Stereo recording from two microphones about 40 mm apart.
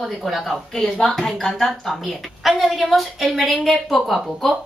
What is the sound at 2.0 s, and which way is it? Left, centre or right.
A woman's voice, centre.